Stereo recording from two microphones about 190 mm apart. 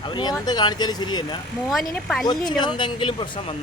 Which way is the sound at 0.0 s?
25° left (ahead or behind).